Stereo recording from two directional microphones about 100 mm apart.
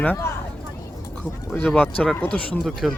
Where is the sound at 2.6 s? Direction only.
Centre (ahead or behind).